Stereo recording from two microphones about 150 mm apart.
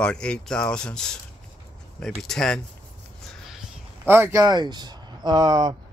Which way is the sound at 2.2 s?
5° left (ahead or behind).